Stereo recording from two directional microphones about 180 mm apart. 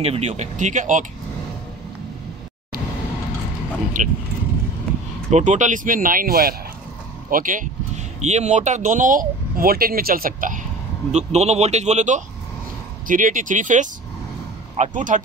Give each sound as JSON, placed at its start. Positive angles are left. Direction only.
{"t": 0.0, "sound": "a man's voice", "side_deg": -35}
{"t": 4.0, "sound": "speech", "side_deg": -45}
{"t": 5.3, "sound": "speech", "side_deg": -40}
{"t": 11.1, "sound": "a man's voice", "side_deg": -40}